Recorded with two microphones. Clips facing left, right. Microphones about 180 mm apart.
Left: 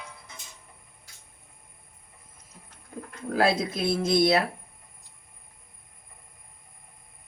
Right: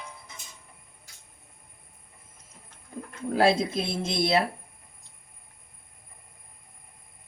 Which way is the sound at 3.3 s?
25° right (ahead or behind).